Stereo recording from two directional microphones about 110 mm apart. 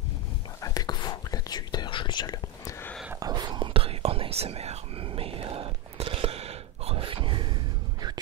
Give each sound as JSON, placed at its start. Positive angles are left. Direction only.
{"t": 0.6, "sound": "whispering", "side_deg": 35}
{"t": 3.2, "sound": "whispering", "side_deg": -40}